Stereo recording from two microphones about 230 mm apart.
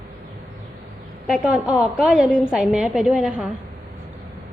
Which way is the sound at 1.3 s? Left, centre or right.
Centre.